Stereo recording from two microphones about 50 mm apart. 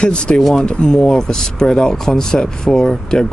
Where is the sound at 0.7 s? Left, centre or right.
Centre.